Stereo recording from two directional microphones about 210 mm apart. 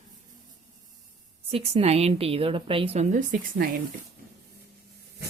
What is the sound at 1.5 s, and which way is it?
A woman's voice, 30° right (ahead or behind).